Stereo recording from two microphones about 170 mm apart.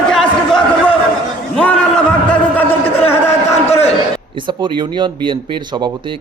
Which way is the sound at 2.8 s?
35° left (ahead or behind).